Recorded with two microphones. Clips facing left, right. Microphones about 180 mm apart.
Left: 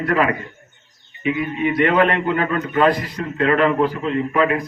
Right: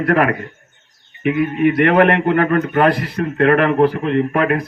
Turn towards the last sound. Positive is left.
turn(degrees=-60)  # may be behind; listen again after turning